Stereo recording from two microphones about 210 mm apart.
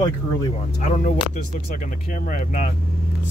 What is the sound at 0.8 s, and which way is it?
Speech, 35° left (ahead or behind).